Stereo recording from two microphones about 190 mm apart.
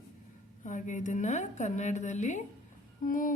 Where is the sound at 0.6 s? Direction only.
40° left (ahead or behind).